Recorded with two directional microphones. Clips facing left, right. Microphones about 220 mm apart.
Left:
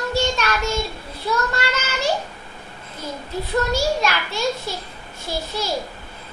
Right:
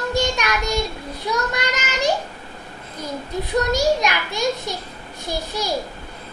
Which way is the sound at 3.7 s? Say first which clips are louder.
Right 2 dB; 15° right (ahead or behind).